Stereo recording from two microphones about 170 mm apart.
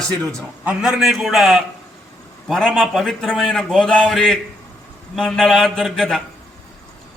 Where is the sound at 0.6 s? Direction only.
5° right (ahead or behind).